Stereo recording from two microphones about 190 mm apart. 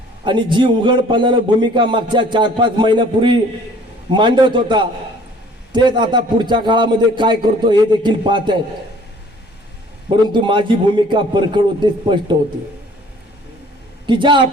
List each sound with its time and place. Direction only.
0.3 s a man's voice: 25° right (ahead or behind)
10.3 s a man's voice: 25° right (ahead or behind)
14.1 s a man's voice: 25° right (ahead or behind)